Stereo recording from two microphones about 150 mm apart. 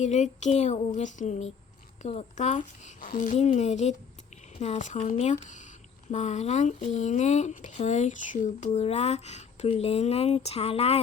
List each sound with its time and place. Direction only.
0.0 s speech: 50° left (ahead or behind)